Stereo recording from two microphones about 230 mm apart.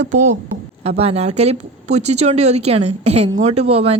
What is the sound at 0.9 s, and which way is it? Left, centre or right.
Speech, right.